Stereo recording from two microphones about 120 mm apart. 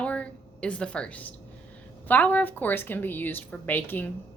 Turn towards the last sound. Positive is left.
turn(degrees=15)  # may be behind; listen again after turning